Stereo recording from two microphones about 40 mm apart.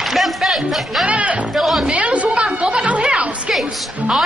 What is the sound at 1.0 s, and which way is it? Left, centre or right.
Speech, right.